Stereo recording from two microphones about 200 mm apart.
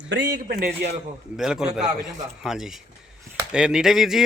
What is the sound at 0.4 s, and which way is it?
Speech, 50° right (ahead or behind).